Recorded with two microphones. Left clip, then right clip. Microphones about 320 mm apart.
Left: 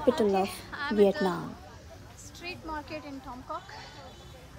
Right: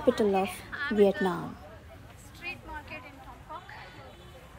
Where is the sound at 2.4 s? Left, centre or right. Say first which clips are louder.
Left 2 dB; centre.